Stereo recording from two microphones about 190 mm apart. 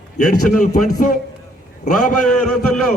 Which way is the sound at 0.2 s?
40° left (ahead or behind).